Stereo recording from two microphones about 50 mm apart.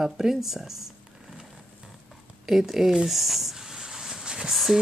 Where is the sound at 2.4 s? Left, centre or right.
Centre.